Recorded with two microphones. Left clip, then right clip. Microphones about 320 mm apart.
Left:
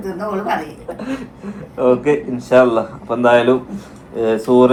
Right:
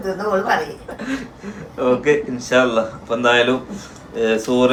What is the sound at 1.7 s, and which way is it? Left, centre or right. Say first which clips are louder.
Speech: left 2 dB; centre.